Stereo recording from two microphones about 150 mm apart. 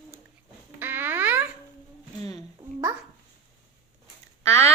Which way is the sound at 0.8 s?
15° right (ahead or behind).